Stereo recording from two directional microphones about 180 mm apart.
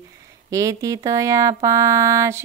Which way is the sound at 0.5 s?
15° right (ahead or behind).